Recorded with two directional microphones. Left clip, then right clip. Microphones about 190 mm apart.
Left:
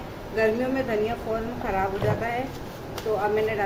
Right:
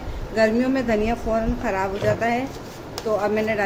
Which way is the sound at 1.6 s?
60° right (ahead or behind).